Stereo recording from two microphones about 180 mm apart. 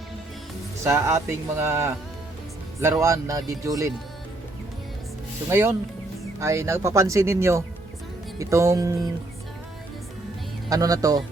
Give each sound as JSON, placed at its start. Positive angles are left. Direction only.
{"t": 0.9, "sound": "speech", "side_deg": -15}
{"t": 5.5, "sound": "speech", "side_deg": -15}
{"t": 10.7, "sound": "speech", "side_deg": -20}